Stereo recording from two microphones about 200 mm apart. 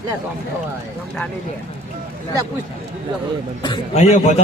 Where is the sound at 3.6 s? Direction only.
30° left (ahead or behind).